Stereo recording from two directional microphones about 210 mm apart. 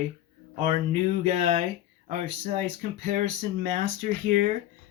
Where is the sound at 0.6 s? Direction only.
30° right (ahead or behind).